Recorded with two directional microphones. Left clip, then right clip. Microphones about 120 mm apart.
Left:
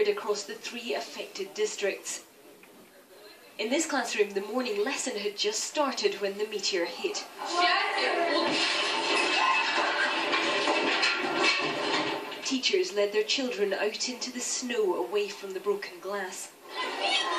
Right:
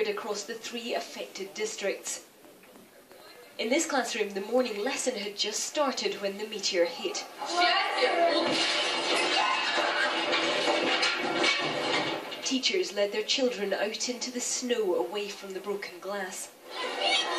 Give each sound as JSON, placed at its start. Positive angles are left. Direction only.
{"t": 0.8, "sound": "speech", "side_deg": -35}
{"t": 3.5, "sound": "a woman's voice", "side_deg": -35}
{"t": 16.7, "sound": "a sound", "side_deg": -30}